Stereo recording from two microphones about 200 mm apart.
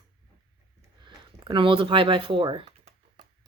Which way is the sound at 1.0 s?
25° right (ahead or behind).